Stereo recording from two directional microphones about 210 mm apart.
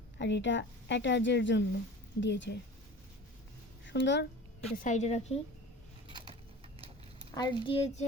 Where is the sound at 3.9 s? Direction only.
60° left (ahead or behind).